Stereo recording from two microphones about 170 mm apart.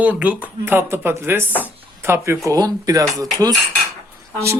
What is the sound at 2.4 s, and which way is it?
Speech, 20° right (ahead or behind).